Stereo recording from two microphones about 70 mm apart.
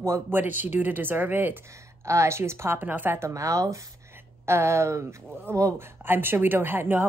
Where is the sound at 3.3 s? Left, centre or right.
Right.